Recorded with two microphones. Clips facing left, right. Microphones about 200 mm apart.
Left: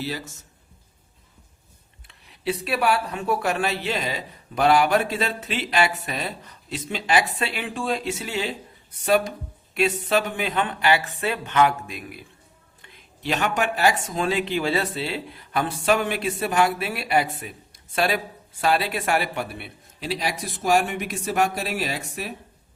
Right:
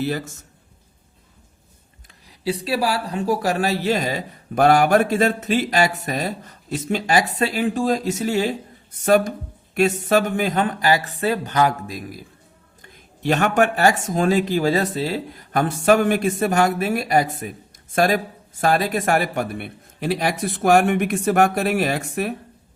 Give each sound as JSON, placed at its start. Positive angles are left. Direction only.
{"t": 0.0, "sound": "speech", "side_deg": -50}
{"t": 2.2, "sound": "speech", "side_deg": -30}